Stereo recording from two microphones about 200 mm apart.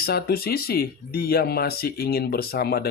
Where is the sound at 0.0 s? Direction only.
50° left (ahead or behind).